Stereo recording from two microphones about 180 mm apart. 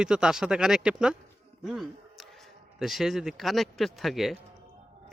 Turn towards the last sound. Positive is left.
turn(degrees=0)  # may be behind; listen again after turning